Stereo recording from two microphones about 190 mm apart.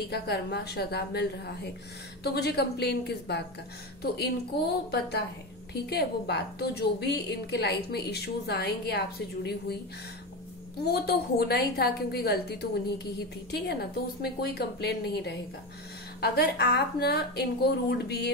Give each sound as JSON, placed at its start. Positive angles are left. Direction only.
{"t": 0.1, "sound": "a woman's voice", "side_deg": 60}
{"t": 5.7, "sound": "a woman's voice", "side_deg": 60}
{"t": 10.8, "sound": "a woman's voice", "side_deg": 55}